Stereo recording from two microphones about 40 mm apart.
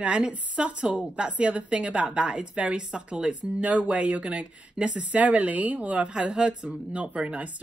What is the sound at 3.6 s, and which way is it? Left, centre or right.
Speech, right.